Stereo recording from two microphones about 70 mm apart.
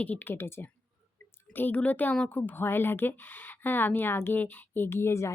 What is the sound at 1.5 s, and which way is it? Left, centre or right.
A woman's voice, left.